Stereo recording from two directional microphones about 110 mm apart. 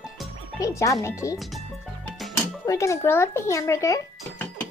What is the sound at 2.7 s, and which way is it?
A child's voice, 25° left (ahead or behind).